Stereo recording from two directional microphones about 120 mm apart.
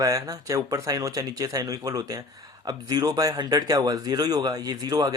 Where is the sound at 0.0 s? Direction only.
30° right (ahead or behind).